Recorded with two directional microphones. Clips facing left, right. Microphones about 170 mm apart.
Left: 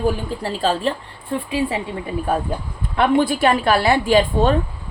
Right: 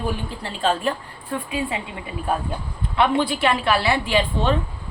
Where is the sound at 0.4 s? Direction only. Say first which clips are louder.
Left 2 dB; 35° left (ahead or behind).